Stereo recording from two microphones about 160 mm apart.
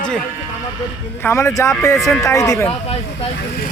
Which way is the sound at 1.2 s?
20° left (ahead or behind).